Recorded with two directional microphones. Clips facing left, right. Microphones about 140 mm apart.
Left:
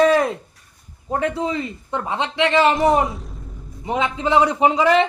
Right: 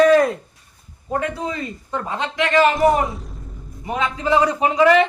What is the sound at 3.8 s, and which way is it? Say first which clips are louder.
A man's voice: left 1 dB; 20° left (ahead or behind).